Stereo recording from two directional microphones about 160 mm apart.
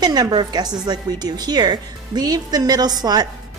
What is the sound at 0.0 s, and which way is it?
Speech, 25° right (ahead or behind).